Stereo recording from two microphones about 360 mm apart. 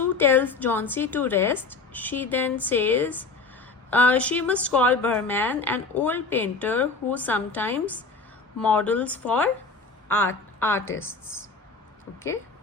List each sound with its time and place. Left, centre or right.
0.0 s a woman's voice: centre